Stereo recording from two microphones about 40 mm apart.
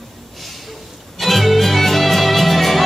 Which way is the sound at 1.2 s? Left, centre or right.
Centre.